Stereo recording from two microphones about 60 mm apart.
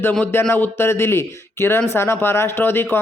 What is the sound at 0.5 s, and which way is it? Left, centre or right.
Speech, left.